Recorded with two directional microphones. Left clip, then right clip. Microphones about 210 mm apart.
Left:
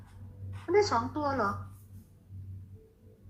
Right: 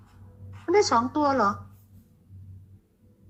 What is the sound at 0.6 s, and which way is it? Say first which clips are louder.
Speech: right 5 dB; 35° right (ahead or behind).